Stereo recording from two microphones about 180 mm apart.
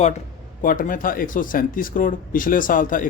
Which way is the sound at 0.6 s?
50° left (ahead or behind).